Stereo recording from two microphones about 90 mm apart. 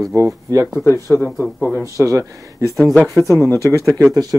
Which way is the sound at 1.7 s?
35° right (ahead or behind).